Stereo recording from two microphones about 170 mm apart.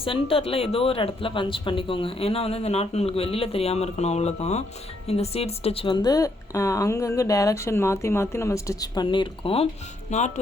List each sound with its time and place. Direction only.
0.0 s speech: 30° left (ahead or behind)
10.1 s speech: 45° left (ahead or behind)